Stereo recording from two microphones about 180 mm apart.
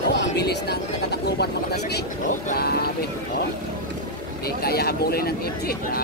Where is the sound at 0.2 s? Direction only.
70° left (ahead or behind).